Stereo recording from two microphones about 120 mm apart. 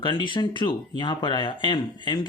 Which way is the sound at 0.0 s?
40° left (ahead or behind).